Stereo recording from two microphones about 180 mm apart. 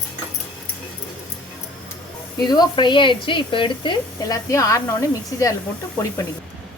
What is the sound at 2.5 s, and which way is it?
A woman's voice, 25° left (ahead or behind).